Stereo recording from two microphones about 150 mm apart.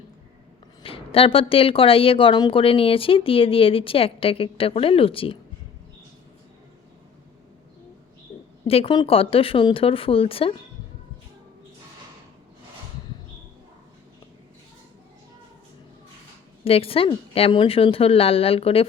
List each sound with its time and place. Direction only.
0.8 s speech: 35° left (ahead or behind)
8.6 s speech: 40° left (ahead or behind)
16.6 s speech: 40° left (ahead or behind)